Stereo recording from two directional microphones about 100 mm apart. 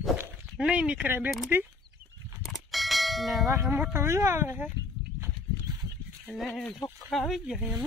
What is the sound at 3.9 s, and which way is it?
Speech, 25° right (ahead or behind).